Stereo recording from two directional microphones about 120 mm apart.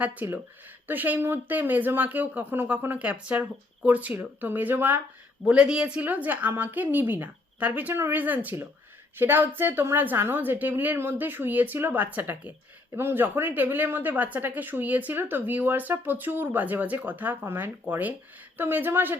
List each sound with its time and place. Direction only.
0.0 s speech: 15° right (ahead or behind)